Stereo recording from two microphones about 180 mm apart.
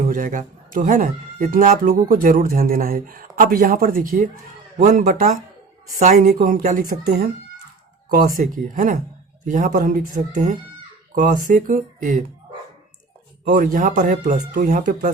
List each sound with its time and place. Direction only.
0.1 s speech: 45° right (ahead or behind)
8.1 s speech: 50° right (ahead or behind)
13.4 s speech: 50° right (ahead or behind)